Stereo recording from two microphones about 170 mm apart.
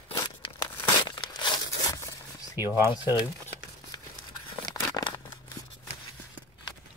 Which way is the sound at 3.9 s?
25° left (ahead or behind).